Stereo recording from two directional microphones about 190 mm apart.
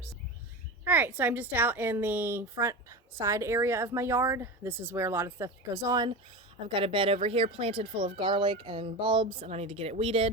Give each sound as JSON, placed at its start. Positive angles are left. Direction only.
{"t": 0.9, "sound": "a woman's voice", "side_deg": -10}